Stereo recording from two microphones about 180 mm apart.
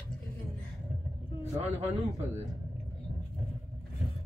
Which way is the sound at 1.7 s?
15° right (ahead or behind).